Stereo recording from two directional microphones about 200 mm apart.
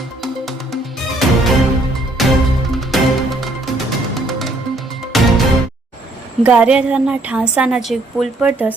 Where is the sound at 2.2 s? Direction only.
Centre (ahead or behind).